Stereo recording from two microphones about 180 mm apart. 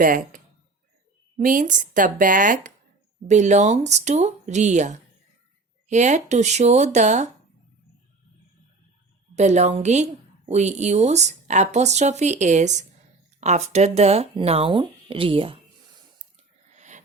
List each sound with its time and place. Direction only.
0.0 s a woman's voice: 50° right (ahead or behind)
9.3 s a woman's voice: 40° right (ahead or behind)
16.7 s a sound: 40° right (ahead or behind)